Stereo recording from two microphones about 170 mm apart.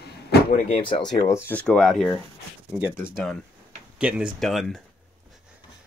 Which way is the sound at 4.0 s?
5° right (ahead or behind).